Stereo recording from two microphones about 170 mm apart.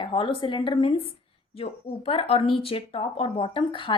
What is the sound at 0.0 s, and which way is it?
A woman's voice, 30° left (ahead or behind).